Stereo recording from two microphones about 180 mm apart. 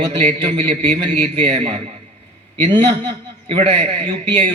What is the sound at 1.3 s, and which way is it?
A man's voice, 35° right (ahead or behind).